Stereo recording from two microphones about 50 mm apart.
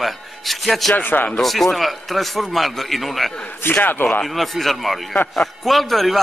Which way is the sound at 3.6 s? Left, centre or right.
Left.